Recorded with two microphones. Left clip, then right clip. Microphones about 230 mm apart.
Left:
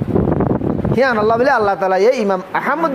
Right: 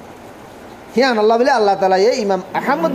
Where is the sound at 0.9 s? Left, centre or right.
Left.